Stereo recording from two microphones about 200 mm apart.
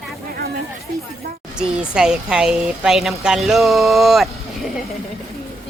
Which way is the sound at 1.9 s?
5° right (ahead or behind).